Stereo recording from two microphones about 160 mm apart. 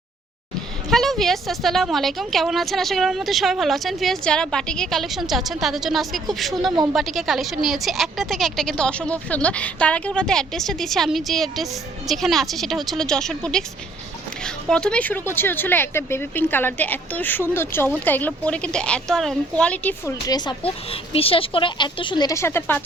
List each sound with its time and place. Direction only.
0.9 s a woman's voice: centre (ahead or behind)
20.2 s speech: 25° left (ahead or behind)
20.9 s speech: 35° left (ahead or behind); by 22.8 s 10° left (ahead or behind)